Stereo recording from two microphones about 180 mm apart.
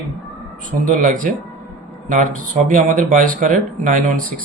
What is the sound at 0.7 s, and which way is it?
Speech, 45° right (ahead or behind).